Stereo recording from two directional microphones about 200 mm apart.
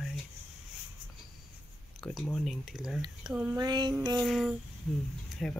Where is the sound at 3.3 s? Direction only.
5° right (ahead or behind).